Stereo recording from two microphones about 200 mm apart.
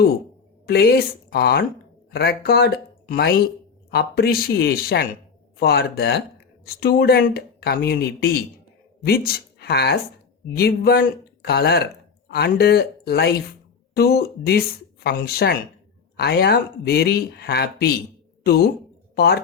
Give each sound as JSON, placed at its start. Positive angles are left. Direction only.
{"t": 0.7, "sound": "speech", "side_deg": 50}